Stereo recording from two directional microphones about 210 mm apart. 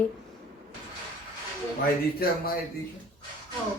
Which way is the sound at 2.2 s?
45° left (ahead or behind).